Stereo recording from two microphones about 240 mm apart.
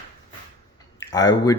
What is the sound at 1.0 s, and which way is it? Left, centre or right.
Speech, centre.